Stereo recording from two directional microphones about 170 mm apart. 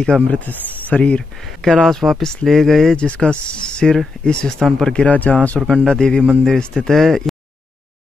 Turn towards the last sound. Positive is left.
turn(degrees=0)  # may be behind; listen again after turning